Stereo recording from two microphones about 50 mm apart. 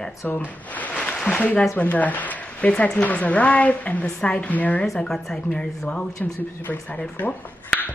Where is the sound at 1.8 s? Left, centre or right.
Left.